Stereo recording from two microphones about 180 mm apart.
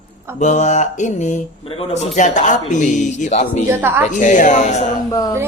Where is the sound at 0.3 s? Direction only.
40° left (ahead or behind).